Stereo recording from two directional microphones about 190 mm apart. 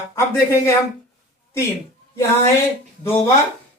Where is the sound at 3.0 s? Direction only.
15° left (ahead or behind).